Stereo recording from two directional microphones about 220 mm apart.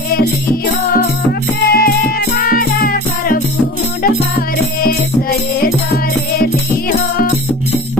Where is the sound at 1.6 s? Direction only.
45° left (ahead or behind).